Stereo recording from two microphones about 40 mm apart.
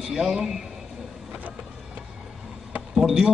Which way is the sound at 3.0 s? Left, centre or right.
Centre.